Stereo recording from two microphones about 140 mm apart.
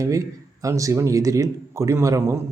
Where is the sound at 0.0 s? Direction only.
25° right (ahead or behind).